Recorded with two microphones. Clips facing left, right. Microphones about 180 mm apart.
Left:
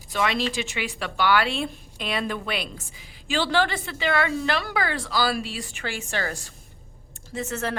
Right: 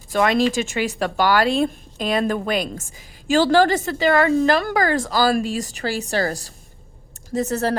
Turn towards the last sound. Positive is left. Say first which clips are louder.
# right 8 dB
turn(degrees=-35)  # may be behind; listen again after turning